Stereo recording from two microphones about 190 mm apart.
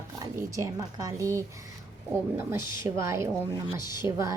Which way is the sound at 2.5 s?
15° right (ahead or behind).